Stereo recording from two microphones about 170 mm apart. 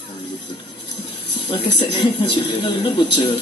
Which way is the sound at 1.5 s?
35° left (ahead or behind).